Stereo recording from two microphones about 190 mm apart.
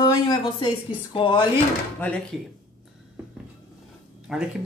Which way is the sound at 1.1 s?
25° left (ahead or behind).